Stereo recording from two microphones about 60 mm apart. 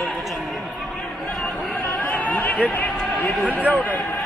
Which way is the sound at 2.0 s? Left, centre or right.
Left.